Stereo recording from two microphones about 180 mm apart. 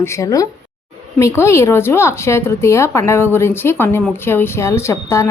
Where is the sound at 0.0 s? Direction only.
15° left (ahead or behind).